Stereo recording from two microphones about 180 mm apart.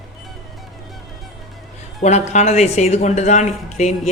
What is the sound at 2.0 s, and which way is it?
A woman's voice, 40° left (ahead or behind).